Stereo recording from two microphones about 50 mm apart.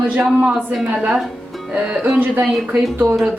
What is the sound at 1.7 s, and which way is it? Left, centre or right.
Speech, right.